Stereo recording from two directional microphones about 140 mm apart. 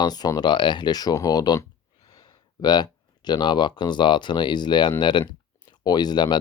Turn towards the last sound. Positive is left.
turn(degrees=30)  # may be behind; listen again after turning